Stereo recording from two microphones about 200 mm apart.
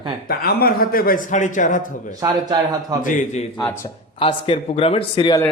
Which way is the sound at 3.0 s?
40° left (ahead or behind).